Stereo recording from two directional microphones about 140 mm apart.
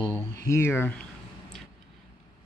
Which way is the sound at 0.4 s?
20° left (ahead or behind).